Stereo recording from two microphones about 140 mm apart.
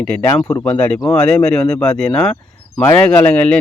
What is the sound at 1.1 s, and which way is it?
Speech, 5° left (ahead or behind).